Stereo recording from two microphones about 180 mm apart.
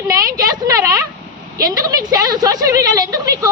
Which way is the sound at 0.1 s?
20° right (ahead or behind).